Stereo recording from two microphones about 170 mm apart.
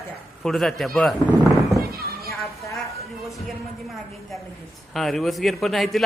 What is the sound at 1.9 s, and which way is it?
Neigh, 65° right (ahead or behind).